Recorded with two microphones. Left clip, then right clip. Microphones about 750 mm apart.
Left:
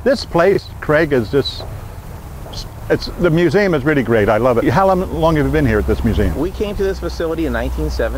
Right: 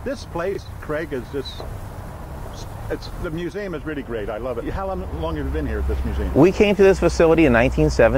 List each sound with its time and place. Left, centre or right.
0.0 s speech: left
2.5 s speech: left
6.4 s speech: right